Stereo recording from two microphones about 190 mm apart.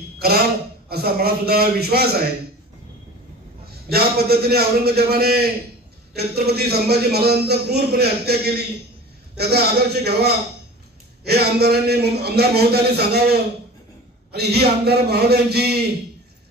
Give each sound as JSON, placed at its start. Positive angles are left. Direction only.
{"t": 0.8, "sound": "a man's voice", "side_deg": -55}
{"t": 3.9, "sound": "a man's voice", "side_deg": -55}